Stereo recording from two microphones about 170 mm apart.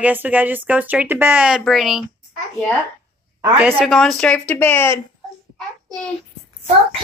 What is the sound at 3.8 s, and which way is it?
Speech, centre (ahead or behind).